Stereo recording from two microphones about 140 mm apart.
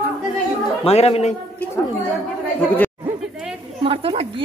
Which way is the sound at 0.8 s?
50° left (ahead or behind).